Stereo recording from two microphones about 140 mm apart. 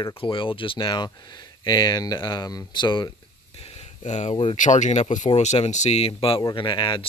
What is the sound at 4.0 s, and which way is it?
Speech, 55° left (ahead or behind).